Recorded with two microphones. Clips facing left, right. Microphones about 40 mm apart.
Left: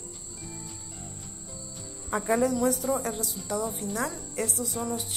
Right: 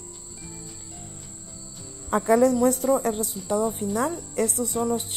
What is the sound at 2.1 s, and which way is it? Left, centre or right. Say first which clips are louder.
Speech: right 6 dB; right.